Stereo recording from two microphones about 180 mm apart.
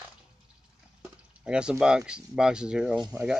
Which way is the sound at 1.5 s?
5° right (ahead or behind).